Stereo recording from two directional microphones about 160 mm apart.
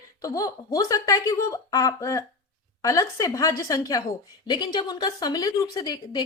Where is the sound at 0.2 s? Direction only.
20° left (ahead or behind).